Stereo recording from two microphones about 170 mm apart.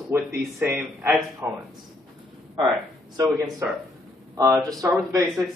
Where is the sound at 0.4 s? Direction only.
5° right (ahead or behind).